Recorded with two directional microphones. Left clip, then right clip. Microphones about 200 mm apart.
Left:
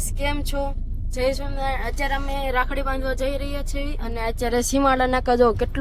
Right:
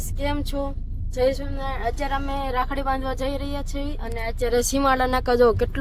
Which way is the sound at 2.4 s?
10° right (ahead or behind).